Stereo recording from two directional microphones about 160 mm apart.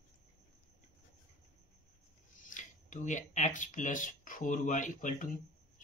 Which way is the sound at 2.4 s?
55° left (ahead or behind).